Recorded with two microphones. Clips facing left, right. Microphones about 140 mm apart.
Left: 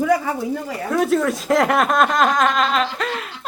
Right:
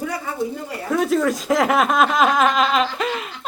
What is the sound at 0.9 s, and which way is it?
Speech, centre (ahead or behind).